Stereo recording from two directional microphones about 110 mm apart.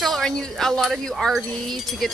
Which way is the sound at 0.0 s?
5° left (ahead or behind).